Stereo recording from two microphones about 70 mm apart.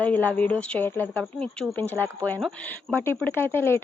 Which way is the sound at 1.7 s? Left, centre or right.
Left.